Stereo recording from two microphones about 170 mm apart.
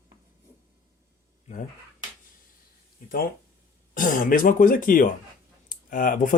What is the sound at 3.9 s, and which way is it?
Speech, 50° left (ahead or behind).